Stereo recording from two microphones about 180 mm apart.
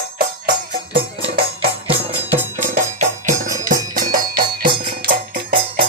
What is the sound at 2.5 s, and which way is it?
Music, 45° right (ahead or behind).